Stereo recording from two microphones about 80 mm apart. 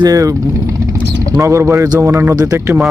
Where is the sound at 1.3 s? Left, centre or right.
Right.